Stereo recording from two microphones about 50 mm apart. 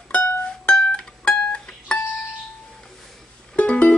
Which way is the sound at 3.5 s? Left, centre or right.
Left.